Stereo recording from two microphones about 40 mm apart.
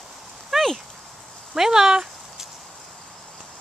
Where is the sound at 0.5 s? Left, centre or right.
Centre.